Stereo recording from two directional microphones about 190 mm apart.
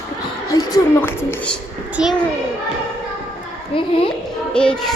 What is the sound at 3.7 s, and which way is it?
Speech, 25° left (ahead or behind).